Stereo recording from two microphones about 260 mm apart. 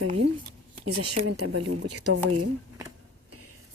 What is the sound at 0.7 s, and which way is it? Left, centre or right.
Speech, right.